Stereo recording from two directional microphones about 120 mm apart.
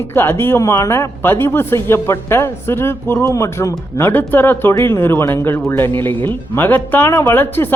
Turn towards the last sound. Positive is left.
turn(degrees=20)  # may be behind; listen again after turning